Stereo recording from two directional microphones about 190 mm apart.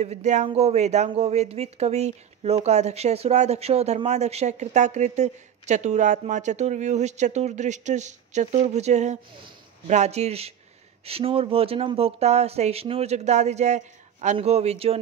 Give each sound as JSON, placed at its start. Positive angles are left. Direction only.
{"t": 0.0, "sound": "speech", "side_deg": -35}